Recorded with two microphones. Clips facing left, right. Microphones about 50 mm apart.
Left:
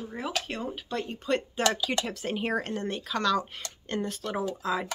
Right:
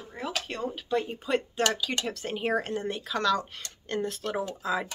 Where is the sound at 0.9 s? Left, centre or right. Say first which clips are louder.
Right 1 dB; centre.